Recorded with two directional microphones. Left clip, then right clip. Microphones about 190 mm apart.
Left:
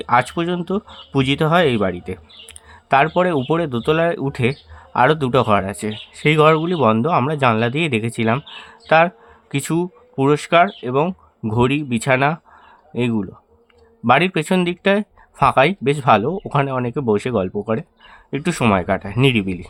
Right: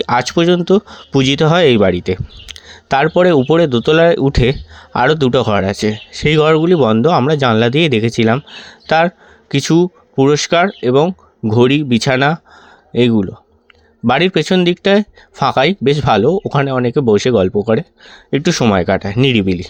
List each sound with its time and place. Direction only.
0.0 s speech: 25° right (ahead or behind)